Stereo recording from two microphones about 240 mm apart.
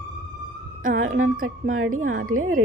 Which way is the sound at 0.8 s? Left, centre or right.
Right.